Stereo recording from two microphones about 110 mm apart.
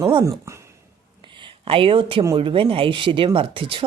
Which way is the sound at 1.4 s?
55° right (ahead or behind).